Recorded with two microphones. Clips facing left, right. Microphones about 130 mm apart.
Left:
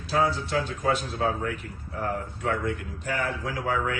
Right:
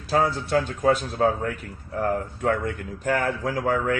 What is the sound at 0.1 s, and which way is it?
Speech, 50° right (ahead or behind).